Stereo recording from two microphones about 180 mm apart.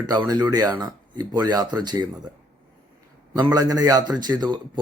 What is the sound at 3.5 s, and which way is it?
A man's voice, 20° right (ahead or behind).